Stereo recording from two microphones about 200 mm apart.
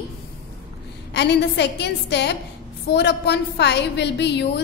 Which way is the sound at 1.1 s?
60° left (ahead or behind).